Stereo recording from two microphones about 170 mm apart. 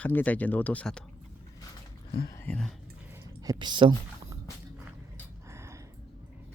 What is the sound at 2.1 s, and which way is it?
Speech, 25° left (ahead or behind).